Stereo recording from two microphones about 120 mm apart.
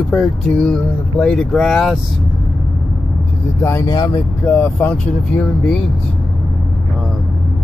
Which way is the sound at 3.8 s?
35° left (ahead or behind).